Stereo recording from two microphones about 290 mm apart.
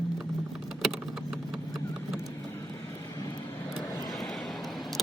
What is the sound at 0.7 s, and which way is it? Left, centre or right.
Vehicle, centre.